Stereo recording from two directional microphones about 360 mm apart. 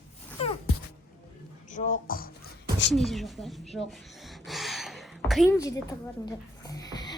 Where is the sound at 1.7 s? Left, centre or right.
Left.